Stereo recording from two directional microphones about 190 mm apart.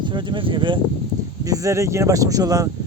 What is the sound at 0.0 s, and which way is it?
Speech, 25° right (ahead or behind).